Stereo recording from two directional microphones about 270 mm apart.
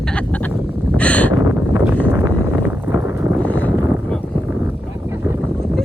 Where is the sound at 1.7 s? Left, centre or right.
Centre.